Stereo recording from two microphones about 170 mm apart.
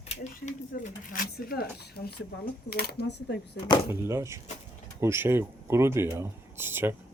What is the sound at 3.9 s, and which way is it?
Speech, 15° right (ahead or behind).